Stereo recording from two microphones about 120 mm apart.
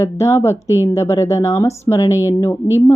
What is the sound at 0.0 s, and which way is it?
Speech, 25° left (ahead or behind).